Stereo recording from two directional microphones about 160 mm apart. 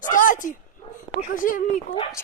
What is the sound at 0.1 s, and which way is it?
Dog, 55° left (ahead or behind).